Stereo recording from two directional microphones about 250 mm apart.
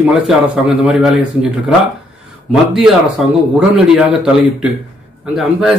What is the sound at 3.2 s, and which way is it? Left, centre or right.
Speech, centre.